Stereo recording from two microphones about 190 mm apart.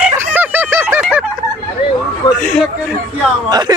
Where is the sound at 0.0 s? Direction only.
10° right (ahead or behind).